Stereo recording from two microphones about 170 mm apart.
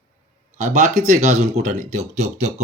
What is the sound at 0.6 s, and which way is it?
Speech, 45° right (ahead or behind).